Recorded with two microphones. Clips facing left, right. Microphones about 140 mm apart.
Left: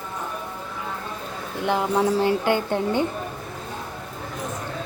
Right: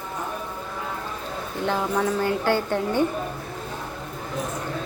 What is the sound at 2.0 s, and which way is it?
Speech, 30° left (ahead or behind).